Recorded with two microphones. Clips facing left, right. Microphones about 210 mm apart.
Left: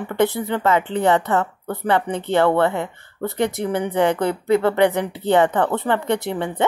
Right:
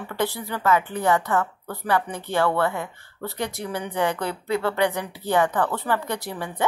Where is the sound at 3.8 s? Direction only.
60° left (ahead or behind).